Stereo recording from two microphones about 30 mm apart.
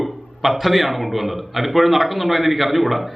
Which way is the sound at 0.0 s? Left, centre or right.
Centre.